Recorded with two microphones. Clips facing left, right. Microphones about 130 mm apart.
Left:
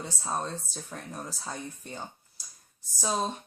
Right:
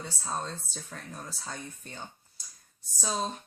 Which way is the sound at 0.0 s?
10° left (ahead or behind).